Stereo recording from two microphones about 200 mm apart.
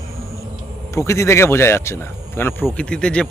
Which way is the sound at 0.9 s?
15° left (ahead or behind).